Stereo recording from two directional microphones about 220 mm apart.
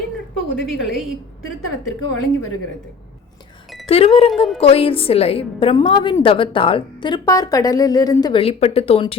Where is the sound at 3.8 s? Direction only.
25° left (ahead or behind).